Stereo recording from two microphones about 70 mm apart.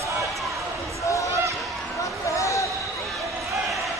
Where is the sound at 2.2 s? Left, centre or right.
Left.